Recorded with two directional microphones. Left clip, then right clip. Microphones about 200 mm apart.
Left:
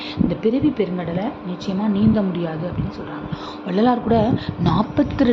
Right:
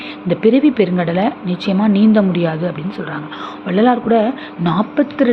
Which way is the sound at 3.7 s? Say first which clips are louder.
Right 5 dB; centre (ahead or behind).